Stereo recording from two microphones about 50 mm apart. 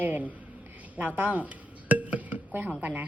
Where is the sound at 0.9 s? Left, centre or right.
Right.